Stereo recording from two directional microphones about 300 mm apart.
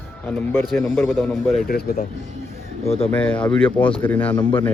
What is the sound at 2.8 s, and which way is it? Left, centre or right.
Speech, centre.